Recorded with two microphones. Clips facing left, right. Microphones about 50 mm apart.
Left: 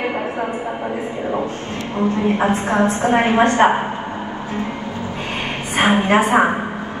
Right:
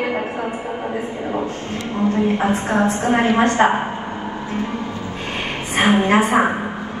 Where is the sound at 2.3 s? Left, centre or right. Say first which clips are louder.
Left 1 dB; left.